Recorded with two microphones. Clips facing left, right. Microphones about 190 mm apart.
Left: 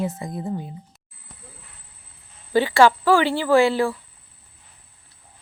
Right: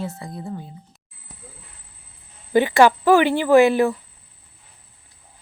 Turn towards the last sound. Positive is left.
turn(degrees=-20)  # may be behind; listen again after turning